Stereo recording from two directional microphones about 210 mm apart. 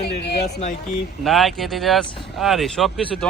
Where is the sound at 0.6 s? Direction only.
35° left (ahead or behind).